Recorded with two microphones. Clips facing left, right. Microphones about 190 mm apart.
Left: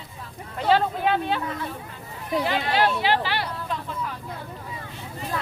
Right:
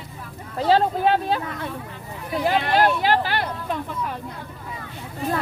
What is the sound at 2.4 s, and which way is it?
Speech, 45° right (ahead or behind).